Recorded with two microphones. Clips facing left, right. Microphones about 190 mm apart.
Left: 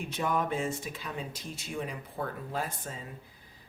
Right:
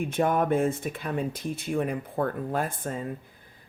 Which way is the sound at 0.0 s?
50° right (ahead or behind).